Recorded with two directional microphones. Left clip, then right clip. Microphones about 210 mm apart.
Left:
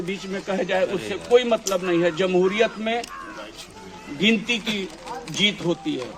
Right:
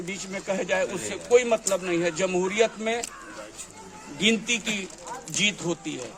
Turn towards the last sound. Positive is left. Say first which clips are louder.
# left 5 dB
turn(degrees=-20)  # may be behind; listen again after turning